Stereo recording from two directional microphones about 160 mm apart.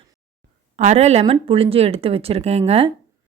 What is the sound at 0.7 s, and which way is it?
A woman's voice, 45° right (ahead or behind).